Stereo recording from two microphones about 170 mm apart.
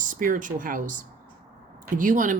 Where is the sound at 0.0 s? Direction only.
50° right (ahead or behind).